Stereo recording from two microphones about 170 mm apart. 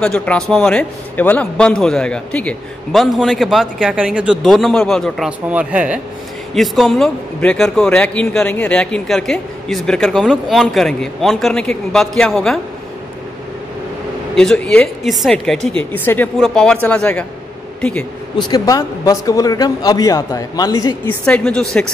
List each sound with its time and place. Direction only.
0.0 s a man's voice: 5° left (ahead or behind)
14.3 s a man's voice: 5° left (ahead or behind)
18.5 s speech: 20° left (ahead or behind)
21.3 s a man's voice: 5° left (ahead or behind)